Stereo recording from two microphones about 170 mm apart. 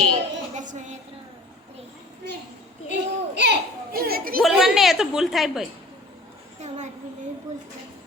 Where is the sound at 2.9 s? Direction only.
90° right; by 4.3 s 60° right (ahead or behind).